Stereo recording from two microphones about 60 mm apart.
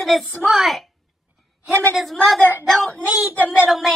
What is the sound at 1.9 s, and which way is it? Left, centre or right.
Speech, centre.